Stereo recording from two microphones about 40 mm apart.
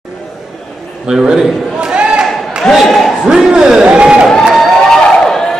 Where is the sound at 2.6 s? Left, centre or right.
Centre.